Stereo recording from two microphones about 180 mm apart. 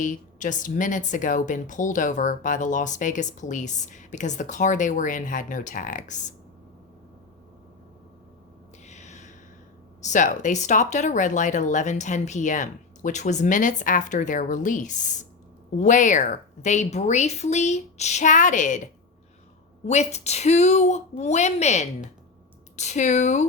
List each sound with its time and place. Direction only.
0.0 s speech: 45° left (ahead or behind)
8.9 s a sound: 40° left (ahead or behind)
10.0 s a woman's voice: 45° left (ahead or behind)